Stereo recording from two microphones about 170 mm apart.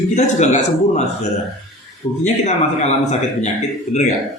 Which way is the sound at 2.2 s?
40° left (ahead or behind).